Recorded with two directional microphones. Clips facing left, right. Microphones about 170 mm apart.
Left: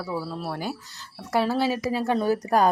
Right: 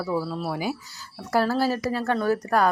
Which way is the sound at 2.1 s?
15° left (ahead or behind).